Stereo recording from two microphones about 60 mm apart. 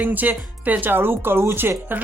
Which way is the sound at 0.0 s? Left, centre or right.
Right.